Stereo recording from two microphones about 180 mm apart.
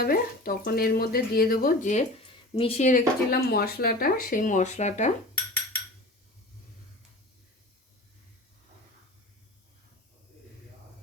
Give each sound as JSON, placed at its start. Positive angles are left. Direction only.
{"t": 0.0, "sound": "speech", "side_deg": 55}